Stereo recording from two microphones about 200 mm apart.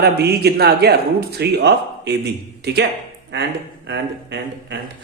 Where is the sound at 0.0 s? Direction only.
55° right (ahead or behind).